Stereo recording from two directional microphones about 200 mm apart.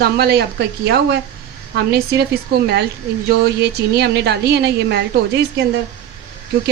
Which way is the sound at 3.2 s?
55° right (ahead or behind).